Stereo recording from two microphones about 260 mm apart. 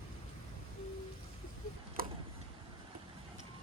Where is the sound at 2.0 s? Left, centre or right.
Right.